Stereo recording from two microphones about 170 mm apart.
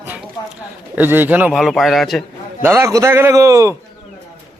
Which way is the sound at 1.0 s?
10° right (ahead or behind).